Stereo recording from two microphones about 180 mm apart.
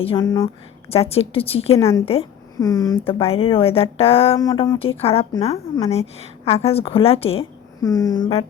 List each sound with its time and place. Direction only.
0.0 s speech: 25° left (ahead or behind)
0.9 s a woman's voice: 35° left (ahead or behind)
1.8 s a woman's voice: 15° left (ahead or behind)
3.0 s a woman's voice: 30° left (ahead or behind)
4.4 s a woman's voice: 20° left (ahead or behind)
7.8 s speech: 20° left (ahead or behind)